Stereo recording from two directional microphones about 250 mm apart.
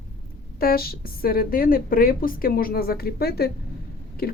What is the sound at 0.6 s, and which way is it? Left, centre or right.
Speech, left.